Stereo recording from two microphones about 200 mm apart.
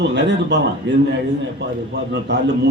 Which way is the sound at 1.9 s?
60° right (ahead or behind).